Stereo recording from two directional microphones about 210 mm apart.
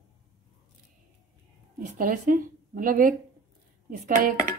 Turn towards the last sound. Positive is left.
turn(degrees=-40)  # may be behind; listen again after turning